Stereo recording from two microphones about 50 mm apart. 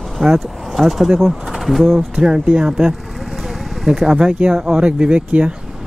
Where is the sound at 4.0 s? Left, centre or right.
Centre.